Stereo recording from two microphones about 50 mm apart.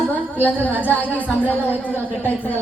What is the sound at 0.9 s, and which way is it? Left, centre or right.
A woman's voice, left.